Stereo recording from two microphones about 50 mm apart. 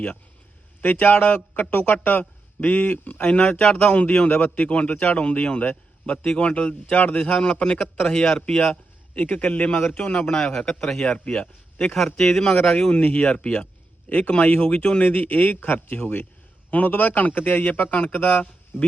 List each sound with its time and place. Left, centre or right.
0.8 s a man's voice: left
3.6 s a man's voice: centre
3.9 s a man's voice: left
11.9 s a man's voice: centre
12.9 s a man's voice: left
14.6 s a man's voice: left